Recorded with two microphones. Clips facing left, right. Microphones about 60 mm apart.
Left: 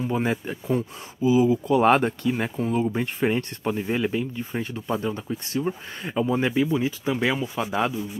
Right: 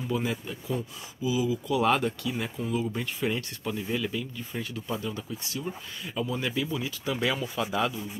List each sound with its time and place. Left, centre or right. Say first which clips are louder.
0.1 s speech: left 5 dB; left